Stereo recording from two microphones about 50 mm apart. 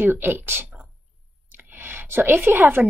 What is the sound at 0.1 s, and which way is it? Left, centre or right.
Speech, right.